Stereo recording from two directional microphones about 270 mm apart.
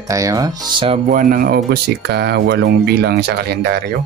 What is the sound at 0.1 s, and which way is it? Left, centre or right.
Speech, centre.